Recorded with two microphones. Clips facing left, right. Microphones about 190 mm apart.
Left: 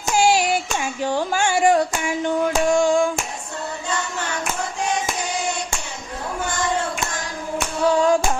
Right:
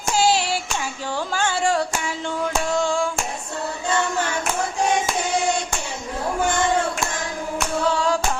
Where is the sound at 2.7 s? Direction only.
15° left (ahead or behind).